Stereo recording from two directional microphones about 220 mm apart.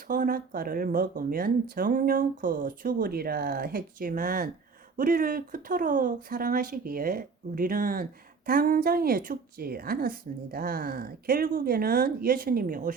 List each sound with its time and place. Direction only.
0.1 s speech: 40° right (ahead or behind)